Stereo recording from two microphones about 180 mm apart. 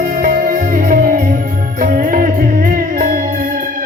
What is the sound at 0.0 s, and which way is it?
Music, 50° right (ahead or behind).